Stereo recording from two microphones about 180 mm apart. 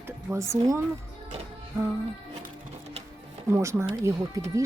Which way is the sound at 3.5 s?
15° right (ahead or behind).